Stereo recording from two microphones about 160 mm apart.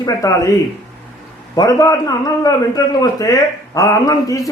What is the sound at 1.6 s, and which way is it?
A man's voice, 20° left (ahead or behind).